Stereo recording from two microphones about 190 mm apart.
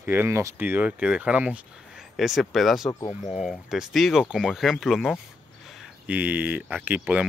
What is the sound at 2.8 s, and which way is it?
Speech, 20° left (ahead or behind).